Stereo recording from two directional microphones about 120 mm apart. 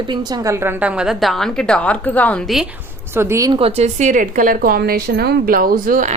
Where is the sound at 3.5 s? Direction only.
55° right (ahead or behind); by 4.4 s 90° right.